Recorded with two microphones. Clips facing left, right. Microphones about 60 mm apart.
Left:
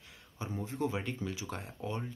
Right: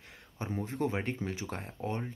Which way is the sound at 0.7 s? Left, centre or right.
Right.